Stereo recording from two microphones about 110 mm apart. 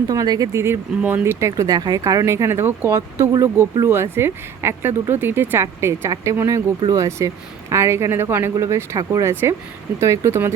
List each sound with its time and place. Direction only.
0.1 s speech: 35° right (ahead or behind)